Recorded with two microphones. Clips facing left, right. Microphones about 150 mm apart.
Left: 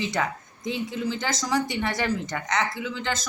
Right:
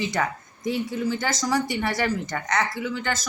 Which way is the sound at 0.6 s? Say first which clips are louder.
Right 3 dB; 20° left (ahead or behind).